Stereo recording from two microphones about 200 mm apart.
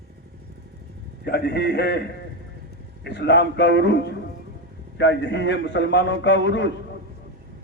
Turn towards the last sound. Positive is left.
turn(degrees=65)  # may be behind; listen again after turning